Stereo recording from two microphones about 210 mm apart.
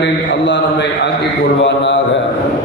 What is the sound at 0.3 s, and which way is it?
A man's voice, 55° left (ahead or behind).